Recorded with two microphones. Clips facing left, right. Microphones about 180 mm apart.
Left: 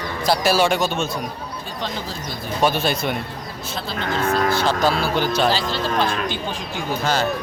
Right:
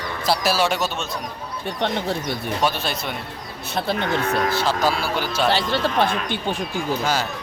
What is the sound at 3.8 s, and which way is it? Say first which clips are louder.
Speech: right 2 dB; 60° right (ahead or behind).